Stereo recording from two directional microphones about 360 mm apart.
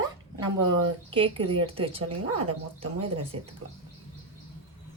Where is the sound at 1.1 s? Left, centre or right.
Centre.